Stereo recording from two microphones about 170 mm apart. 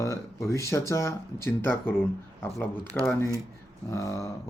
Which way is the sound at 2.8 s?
20° right (ahead or behind).